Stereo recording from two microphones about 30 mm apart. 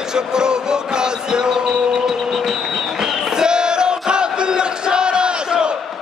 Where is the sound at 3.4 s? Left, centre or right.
Right.